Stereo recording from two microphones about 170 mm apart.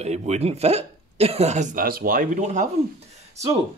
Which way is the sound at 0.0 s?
40° right (ahead or behind).